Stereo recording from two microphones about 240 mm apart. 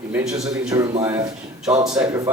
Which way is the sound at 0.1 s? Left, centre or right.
Centre.